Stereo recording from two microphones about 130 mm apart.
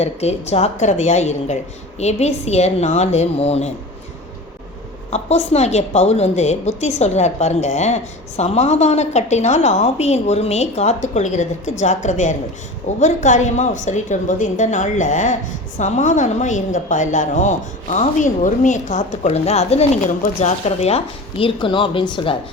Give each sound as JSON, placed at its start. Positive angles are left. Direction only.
{"t": 0.0, "sound": "a woman's voice", "side_deg": 55}
{"t": 5.1, "sound": "a woman's voice", "side_deg": 55}